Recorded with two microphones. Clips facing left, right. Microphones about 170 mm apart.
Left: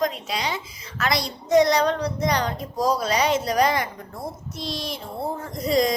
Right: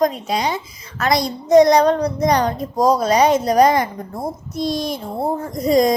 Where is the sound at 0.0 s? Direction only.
45° right (ahead or behind).